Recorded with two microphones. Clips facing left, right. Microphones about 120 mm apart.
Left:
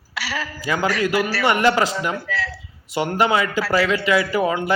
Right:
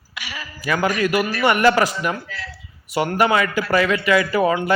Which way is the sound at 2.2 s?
90° left.